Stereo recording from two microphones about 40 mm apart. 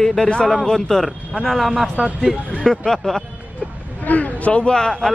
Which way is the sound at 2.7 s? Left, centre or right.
Centre.